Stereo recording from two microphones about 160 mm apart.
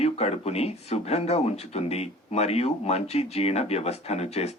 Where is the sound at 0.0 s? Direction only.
40° left (ahead or behind).